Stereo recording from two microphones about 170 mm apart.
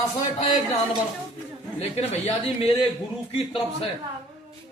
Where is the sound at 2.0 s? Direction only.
35° left (ahead or behind).